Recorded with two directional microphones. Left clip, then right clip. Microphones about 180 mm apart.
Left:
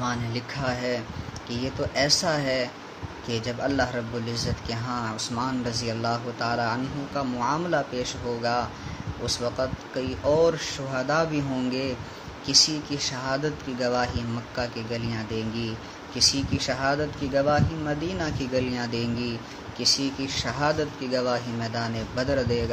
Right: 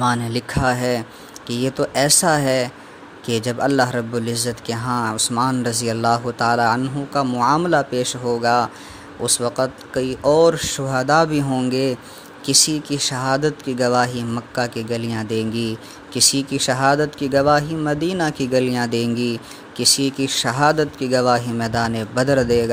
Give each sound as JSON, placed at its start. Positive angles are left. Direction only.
{"t": 0.0, "sound": "speech", "side_deg": -60}